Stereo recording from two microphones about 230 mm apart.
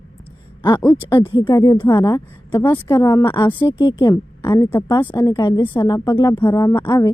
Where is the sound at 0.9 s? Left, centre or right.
Centre.